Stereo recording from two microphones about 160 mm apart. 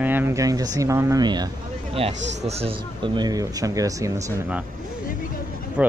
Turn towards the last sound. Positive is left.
turn(degrees=-10)  # may be behind; listen again after turning